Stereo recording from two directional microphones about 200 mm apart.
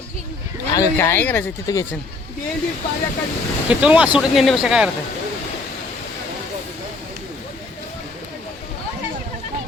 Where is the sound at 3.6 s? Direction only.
5° right (ahead or behind).